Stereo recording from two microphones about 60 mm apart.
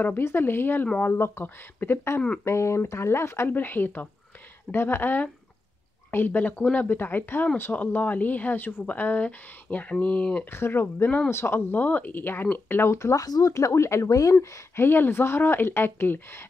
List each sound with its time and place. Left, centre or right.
0.2 s speech: left
2.4 s speech: left
3.4 s speech: left
10.5 s speech: left
11.8 s speech: left
12.9 s speech: left
14.0 s speech: left
14.8 s speech: left